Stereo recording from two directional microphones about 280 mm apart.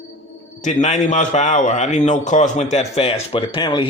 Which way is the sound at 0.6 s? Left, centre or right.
Left.